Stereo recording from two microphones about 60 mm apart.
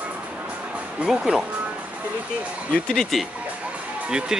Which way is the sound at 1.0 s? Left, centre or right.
Centre.